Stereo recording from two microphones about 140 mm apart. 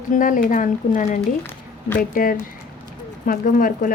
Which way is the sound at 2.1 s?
90° left.